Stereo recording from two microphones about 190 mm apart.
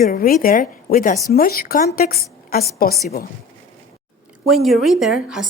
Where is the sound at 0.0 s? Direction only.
50° left (ahead or behind).